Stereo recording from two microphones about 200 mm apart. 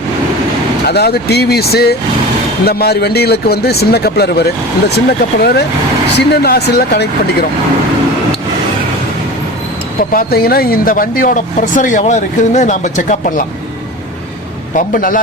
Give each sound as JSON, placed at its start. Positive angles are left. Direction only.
{"t": 0.9, "sound": "a man's voice", "side_deg": 55}
{"t": 10.1, "sound": "speech", "side_deg": 45}
{"t": 14.9, "sound": "a man's voice", "side_deg": 45}